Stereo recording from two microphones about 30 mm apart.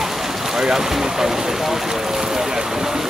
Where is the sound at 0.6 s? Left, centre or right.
Centre.